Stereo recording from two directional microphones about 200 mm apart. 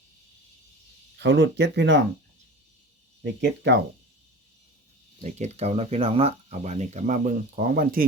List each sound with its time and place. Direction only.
1.2 s speech: 60° right (ahead or behind)
3.2 s speech: 60° right (ahead or behind)
5.2 s speech: 35° right (ahead or behind)